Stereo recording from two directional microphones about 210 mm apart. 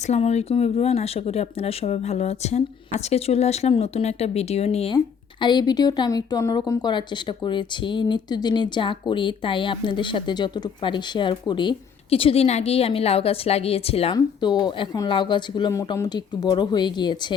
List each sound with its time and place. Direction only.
0.0 s a woman's voice: 30° left (ahead or behind)